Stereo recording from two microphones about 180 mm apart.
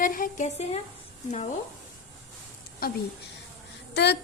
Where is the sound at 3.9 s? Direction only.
70° left (ahead or behind).